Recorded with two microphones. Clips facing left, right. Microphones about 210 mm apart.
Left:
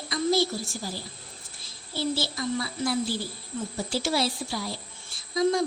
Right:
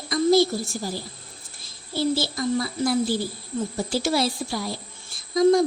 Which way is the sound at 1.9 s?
45° right (ahead or behind).